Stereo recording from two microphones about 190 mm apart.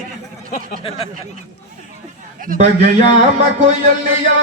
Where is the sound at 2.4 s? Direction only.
45° right (ahead or behind).